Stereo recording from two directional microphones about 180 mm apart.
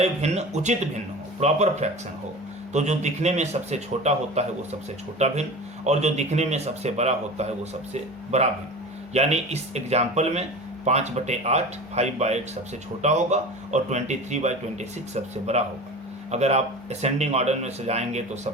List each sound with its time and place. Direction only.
0.0 s speech: 35° right (ahead or behind)